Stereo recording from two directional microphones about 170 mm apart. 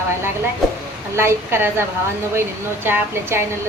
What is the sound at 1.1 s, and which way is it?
A woman's voice, 15° right (ahead or behind).